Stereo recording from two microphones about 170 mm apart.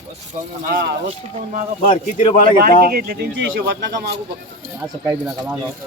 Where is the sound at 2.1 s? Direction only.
45° left (ahead or behind).